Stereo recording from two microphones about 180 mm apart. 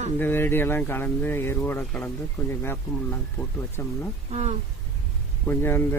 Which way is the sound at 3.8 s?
15° left (ahead or behind).